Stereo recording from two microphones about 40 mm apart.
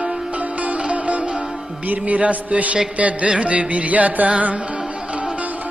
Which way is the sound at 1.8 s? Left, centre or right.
Right.